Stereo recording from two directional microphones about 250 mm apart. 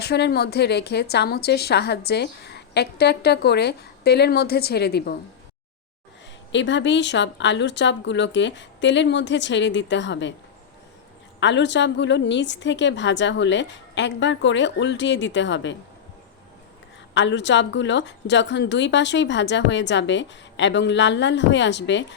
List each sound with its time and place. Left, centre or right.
0.0 s a woman's voice: left
6.5 s a woman's voice: left
11.3 s a woman's voice: left
17.2 s a woman's voice: left